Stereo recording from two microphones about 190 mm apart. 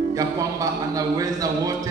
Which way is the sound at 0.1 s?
20° right (ahead or behind).